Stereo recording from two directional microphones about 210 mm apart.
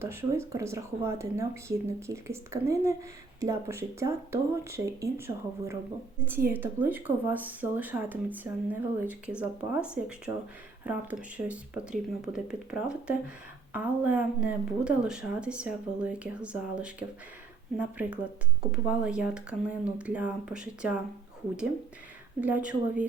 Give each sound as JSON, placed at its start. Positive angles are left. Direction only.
{"t": 0.0, "sound": "speech", "side_deg": -10}
{"t": 22.4, "sound": "speech", "side_deg": -5}